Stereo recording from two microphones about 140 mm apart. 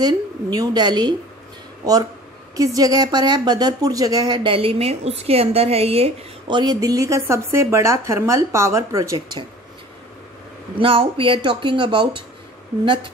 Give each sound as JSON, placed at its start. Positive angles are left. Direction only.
{"t": 0.0, "sound": "a woman's voice", "side_deg": -30}
{"t": 10.8, "sound": "speech", "side_deg": -40}